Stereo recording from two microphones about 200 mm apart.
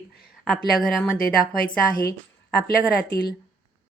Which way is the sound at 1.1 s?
45° left (ahead or behind).